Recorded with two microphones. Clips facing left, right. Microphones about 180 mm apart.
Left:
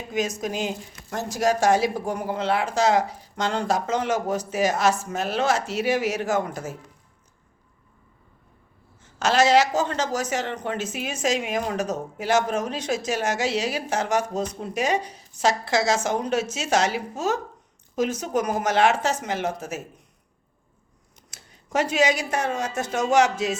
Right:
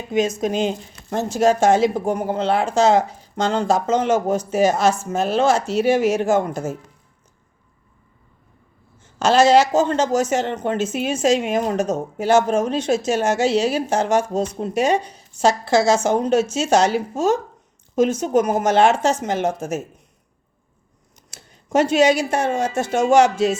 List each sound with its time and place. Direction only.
0.1 s a woman's voice: 25° right (ahead or behind)
9.1 s a woman's voice: 30° right (ahead or behind)
21.2 s speech: 30° right (ahead or behind)